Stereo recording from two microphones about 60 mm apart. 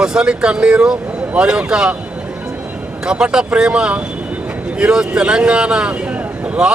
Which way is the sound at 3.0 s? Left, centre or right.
Centre.